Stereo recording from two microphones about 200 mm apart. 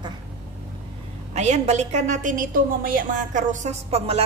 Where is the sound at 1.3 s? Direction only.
35° right (ahead or behind).